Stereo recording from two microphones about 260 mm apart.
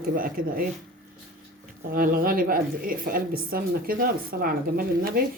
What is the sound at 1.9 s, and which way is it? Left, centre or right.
A woman's voice, right.